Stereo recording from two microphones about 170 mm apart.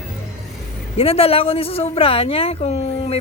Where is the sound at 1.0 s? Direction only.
35° left (ahead or behind).